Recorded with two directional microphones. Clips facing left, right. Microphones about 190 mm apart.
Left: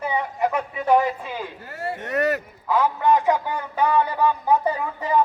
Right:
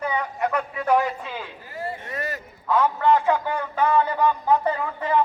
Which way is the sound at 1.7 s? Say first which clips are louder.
Left 5 dB; 70° left (ahead or behind).